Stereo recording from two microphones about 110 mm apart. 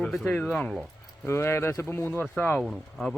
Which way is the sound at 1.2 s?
25° left (ahead or behind).